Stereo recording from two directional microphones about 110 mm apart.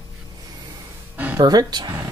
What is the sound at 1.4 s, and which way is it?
Speech, 40° right (ahead or behind).